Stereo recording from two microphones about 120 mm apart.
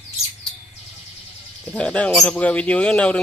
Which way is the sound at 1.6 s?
10° left (ahead or behind).